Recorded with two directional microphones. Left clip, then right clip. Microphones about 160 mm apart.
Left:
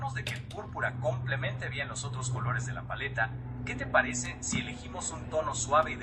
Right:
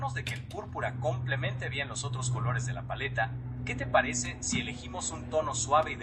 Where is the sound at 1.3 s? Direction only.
30° right (ahead or behind).